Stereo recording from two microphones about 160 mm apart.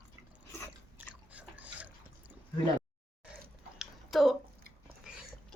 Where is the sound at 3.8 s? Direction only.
Centre (ahead or behind).